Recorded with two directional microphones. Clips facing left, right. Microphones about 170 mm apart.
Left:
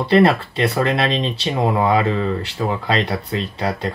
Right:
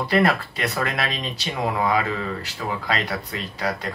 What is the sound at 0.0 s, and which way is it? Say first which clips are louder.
Speech: left 6 dB; 30° left (ahead or behind).